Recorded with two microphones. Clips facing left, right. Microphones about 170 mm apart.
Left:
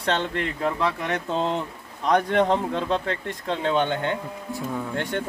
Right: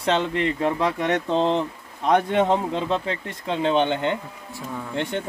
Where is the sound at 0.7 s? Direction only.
30° right (ahead or behind).